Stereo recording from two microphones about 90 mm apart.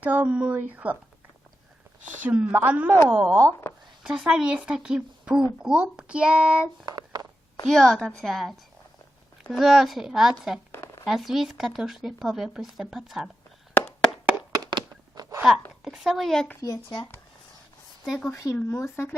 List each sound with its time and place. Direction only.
0.0 s speech: 20° right (ahead or behind)
2.1 s speech: 15° right (ahead or behind)
6.8 s a sound: 50° right (ahead or behind)
7.7 s speech: centre (ahead or behind)
10.7 s a sound: 25° left (ahead or behind)
11.0 s speech: 5° right (ahead or behind)
14.5 s a sound: 50° right (ahead or behind)
15.4 s speech: 5° right (ahead or behind)
16.6 s speech: 40° left (ahead or behind)
18.0 s speech: centre (ahead or behind)
18.3 s speech: 35° left (ahead or behind)